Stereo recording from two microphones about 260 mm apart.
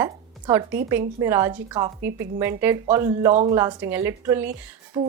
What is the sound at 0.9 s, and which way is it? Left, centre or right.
Speech, centre.